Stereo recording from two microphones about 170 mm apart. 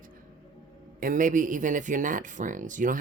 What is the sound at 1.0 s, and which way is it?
Speech, 50° right (ahead or behind).